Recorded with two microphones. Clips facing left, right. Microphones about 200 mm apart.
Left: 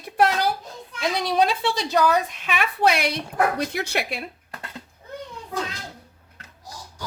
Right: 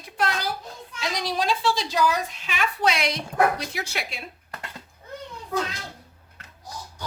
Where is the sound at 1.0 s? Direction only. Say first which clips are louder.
Left 5 dB; 55° left (ahead or behind).